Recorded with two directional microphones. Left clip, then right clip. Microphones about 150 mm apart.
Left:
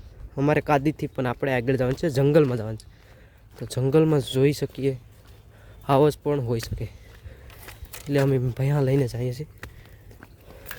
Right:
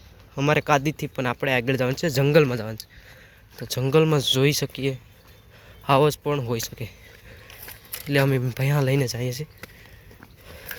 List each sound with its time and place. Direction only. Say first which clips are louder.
0.3 s speech: right 1 dB; 30° left (ahead or behind)
7.9 s a sound: right 2 dB; 15° left (ahead or behind)
8.3 s speech: even; 15° left (ahead or behind)